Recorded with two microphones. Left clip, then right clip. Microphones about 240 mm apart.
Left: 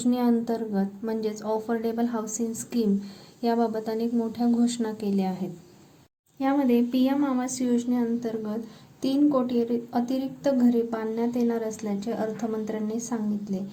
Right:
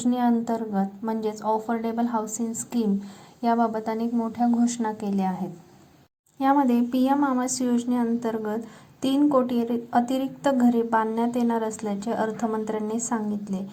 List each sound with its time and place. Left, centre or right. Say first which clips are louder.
0.0 s a woman's voice: right 1 dB; centre
4.9 s a woman's voice: left 1 dB; right
6.4 s a woman's voice: right 3 dB; right